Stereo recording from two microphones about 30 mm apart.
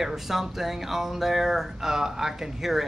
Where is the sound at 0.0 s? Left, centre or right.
Centre.